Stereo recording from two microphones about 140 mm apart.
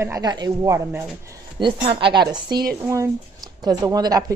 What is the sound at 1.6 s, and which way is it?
Speech, 40° right (ahead or behind).